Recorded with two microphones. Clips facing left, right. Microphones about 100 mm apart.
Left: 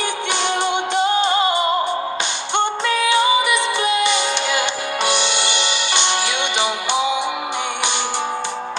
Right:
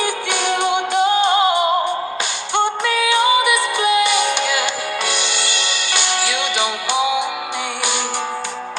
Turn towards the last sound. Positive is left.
turn(degrees=20)  # may be behind; listen again after turning